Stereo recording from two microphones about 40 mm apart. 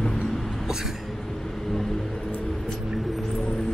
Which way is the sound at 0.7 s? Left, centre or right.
Centre.